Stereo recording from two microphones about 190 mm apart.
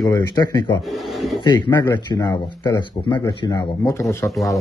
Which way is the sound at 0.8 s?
Centre (ahead or behind).